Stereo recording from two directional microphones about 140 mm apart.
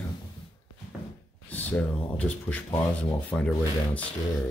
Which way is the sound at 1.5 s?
10° left (ahead or behind).